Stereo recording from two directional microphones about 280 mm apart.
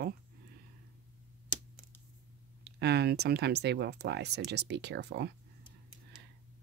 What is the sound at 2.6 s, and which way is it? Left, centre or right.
Speech, right.